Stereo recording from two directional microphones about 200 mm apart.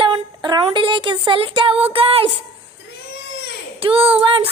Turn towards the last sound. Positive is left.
turn(degrees=-25)  # may be behind; listen again after turning